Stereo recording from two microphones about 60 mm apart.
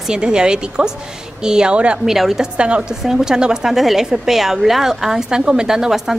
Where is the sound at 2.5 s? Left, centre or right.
Centre.